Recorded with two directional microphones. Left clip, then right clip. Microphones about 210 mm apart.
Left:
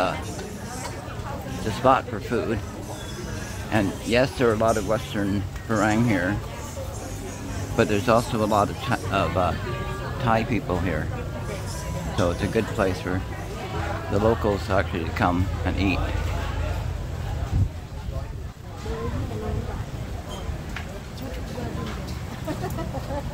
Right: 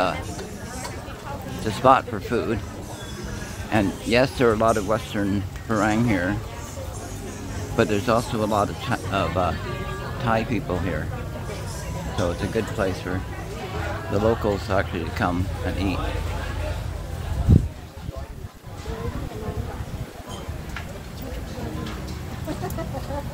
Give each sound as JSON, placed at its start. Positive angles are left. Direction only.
{"t": 1.6, "sound": "speech", "side_deg": -20}
{"t": 3.7, "sound": "speech", "side_deg": -15}
{"t": 7.7, "sound": "speech", "side_deg": -5}
{"t": 12.2, "sound": "speech", "side_deg": 10}
{"t": 14.1, "sound": "speech", "side_deg": 0}